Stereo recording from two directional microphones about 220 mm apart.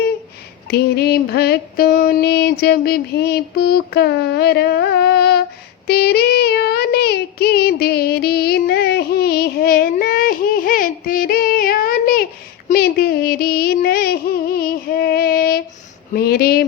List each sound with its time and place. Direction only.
0.7 s female singing: 45° left (ahead or behind)
5.9 s child singing: 45° left (ahead or behind)
12.6 s a sound: 45° left (ahead or behind)
16.1 s speech: 45° left (ahead or behind)